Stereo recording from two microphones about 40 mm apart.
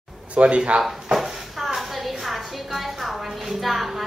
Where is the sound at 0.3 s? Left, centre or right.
Right.